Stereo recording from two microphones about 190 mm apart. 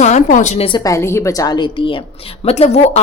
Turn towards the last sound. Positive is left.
turn(degrees=35)  # may be behind; listen again after turning